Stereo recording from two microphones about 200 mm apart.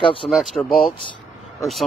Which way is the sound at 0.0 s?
25° left (ahead or behind).